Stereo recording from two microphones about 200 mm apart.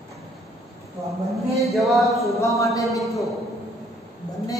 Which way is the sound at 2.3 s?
15° left (ahead or behind).